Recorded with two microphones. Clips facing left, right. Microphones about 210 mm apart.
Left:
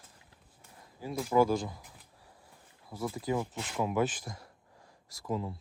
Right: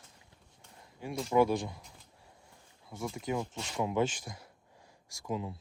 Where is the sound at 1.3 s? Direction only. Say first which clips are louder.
Even; 10° right (ahead or behind).